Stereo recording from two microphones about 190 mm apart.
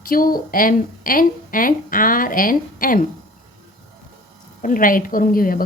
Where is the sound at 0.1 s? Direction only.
50° left (ahead or behind).